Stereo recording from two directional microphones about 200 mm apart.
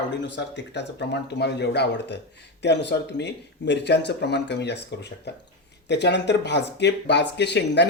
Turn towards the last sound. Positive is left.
turn(degrees=60)  # may be behind; listen again after turning